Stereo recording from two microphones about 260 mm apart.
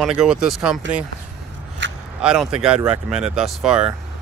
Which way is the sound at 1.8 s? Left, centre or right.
Right.